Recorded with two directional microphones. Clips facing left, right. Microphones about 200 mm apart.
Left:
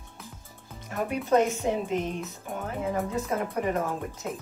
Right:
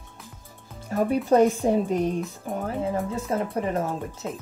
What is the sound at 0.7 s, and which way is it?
Music, 30° right (ahead or behind).